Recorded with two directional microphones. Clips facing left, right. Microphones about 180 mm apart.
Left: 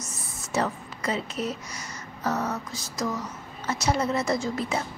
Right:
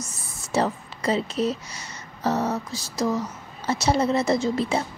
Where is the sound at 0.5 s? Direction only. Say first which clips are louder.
Right 4 dB; 30° right (ahead or behind).